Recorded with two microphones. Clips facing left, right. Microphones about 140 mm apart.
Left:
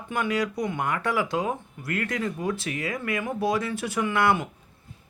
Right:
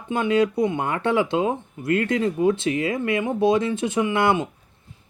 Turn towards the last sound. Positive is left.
turn(degrees=-20)  # may be behind; listen again after turning